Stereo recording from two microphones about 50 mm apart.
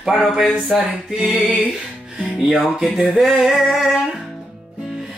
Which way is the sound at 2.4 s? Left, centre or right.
Centre.